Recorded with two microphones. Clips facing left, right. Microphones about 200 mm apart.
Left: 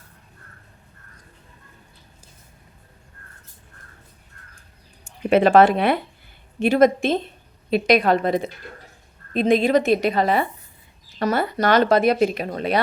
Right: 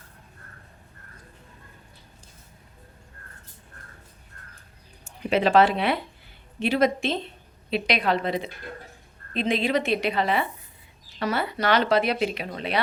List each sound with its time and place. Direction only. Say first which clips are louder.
5.0 s speech: left 6 dB; 50° left (ahead or behind)